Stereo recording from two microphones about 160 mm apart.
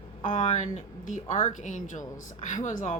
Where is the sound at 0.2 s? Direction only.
50° left (ahead or behind).